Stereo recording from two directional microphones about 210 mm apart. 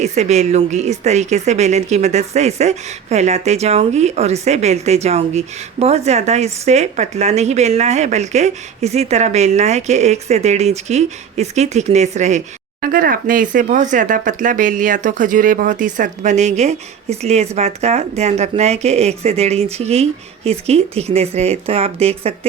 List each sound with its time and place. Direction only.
0.0 s speech: 35° right (ahead or behind)